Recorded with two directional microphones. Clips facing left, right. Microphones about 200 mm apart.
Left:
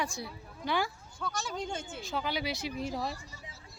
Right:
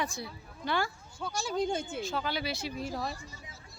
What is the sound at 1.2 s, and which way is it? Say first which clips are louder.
Speech: right 5 dB; 30° right (ahead or behind).